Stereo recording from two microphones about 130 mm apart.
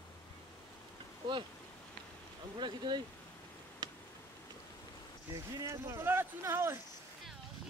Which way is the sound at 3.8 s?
35° right (ahead or behind).